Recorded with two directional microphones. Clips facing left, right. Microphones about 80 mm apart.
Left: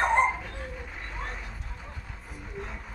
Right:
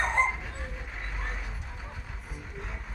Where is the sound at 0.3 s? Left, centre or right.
Centre.